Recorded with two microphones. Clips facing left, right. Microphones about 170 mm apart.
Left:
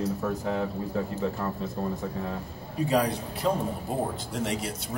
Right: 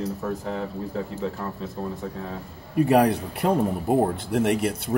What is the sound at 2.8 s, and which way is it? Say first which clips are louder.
Speech: right 7 dB; 60° right (ahead or behind).